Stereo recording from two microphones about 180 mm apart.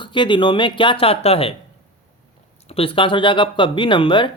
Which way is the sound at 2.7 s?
30° left (ahead or behind).